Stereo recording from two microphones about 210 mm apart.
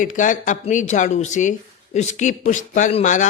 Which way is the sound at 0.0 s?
35° left (ahead or behind).